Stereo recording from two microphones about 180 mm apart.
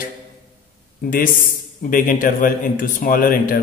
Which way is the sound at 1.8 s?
50° left (ahead or behind).